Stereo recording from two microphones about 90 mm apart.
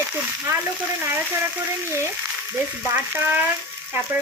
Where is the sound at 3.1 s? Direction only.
20° right (ahead or behind).